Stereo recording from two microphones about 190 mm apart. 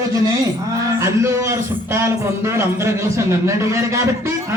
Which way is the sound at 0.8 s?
15° right (ahead or behind).